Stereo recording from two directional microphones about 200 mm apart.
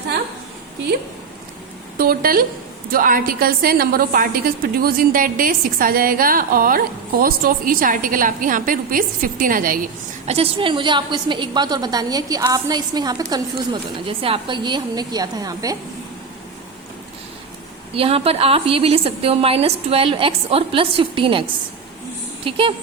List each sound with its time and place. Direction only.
2.0 s a woman's voice: 45° right (ahead or behind)
10.2 s a woman's voice: 30° right (ahead or behind)
17.9 s a woman's voice: 30° right (ahead or behind)
22.4 s a woman's voice: 25° right (ahead or behind)